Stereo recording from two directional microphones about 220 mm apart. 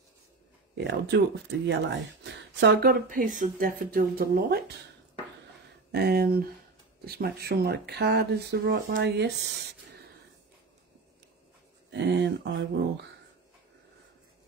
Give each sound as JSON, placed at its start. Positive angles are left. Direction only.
{"t": 0.7, "sound": "speech", "side_deg": -50}
{"t": 5.9, "sound": "speech", "side_deg": -45}
{"t": 11.9, "sound": "speech", "side_deg": -55}